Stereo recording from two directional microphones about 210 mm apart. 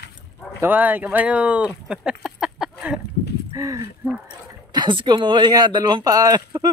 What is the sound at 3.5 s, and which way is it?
Speech, 15° right (ahead or behind).